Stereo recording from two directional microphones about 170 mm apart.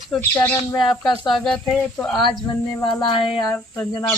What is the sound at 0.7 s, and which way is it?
Speech, 25° left (ahead or behind).